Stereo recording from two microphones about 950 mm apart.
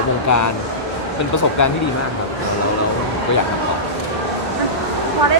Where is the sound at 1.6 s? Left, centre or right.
Centre.